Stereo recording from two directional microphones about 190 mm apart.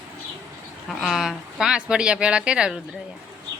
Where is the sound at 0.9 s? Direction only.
Centre (ahead or behind).